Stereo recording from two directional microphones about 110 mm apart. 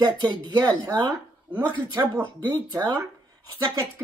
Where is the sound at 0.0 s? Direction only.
40° right (ahead or behind).